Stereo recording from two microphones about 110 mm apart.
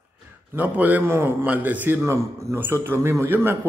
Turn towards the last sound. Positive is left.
turn(degrees=-20)  # may be behind; listen again after turning